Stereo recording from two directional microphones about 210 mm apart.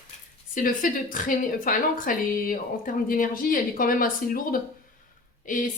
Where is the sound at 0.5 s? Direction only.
40° left (ahead or behind).